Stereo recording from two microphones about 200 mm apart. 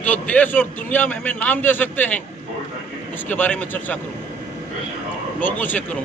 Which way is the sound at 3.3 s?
10° left (ahead or behind).